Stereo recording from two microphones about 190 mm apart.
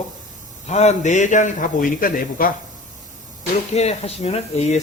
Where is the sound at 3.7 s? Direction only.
35° left (ahead or behind).